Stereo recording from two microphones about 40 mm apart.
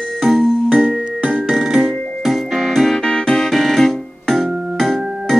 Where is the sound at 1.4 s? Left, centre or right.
Centre.